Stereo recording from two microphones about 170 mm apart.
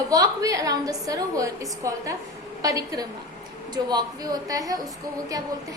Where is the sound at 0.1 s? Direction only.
20° right (ahead or behind).